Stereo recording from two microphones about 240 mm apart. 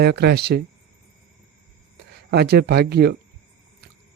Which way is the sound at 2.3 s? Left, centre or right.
Right.